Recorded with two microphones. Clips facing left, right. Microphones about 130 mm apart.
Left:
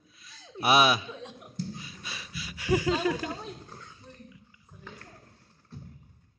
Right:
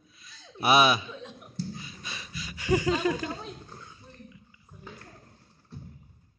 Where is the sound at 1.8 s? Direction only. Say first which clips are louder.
Right 1 dB; 5° left (ahead or behind).